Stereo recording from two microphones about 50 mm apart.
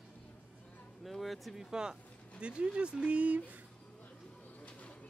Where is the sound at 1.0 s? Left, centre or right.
Centre.